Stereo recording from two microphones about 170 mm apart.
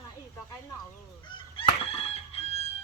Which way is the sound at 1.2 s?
30° left (ahead or behind).